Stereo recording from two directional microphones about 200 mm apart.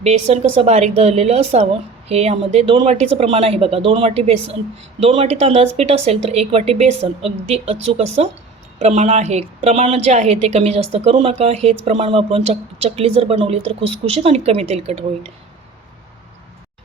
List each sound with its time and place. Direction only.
0.0 s a woman's voice: 30° right (ahead or behind)